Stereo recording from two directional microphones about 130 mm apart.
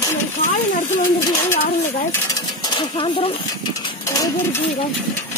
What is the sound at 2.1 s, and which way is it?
Speech, 25° left (ahead or behind).